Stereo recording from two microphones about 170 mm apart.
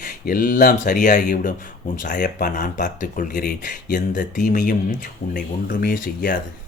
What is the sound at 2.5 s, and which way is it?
Speech, 50° left (ahead or behind).